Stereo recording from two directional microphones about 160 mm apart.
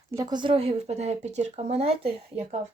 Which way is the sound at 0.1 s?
25° right (ahead or behind).